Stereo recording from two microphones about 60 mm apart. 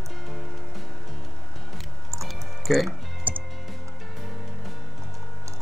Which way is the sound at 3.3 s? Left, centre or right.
Right.